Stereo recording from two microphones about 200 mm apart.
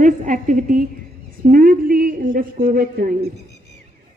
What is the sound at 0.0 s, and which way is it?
A woman's voice, 40° right (ahead or behind).